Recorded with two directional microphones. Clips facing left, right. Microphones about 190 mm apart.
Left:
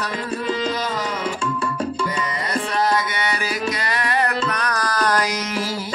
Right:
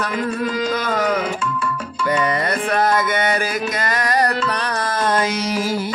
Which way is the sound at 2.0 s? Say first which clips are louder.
Right 6 dB; 60° right (ahead or behind).